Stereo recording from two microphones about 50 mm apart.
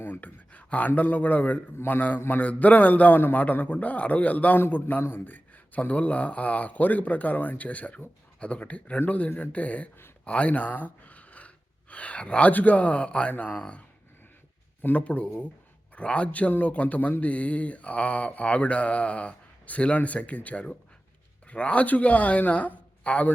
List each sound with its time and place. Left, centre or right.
0.0 s a man's voice: left
10.2 s gasp: left
12.5 s speech: left
14.8 s a man's voice: left